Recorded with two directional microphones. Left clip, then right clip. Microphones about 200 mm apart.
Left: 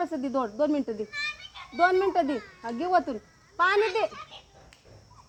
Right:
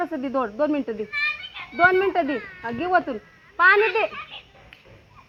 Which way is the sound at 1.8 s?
15° right (ahead or behind).